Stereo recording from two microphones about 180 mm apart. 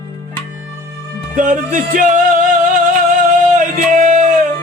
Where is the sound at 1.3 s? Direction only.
45° right (ahead or behind).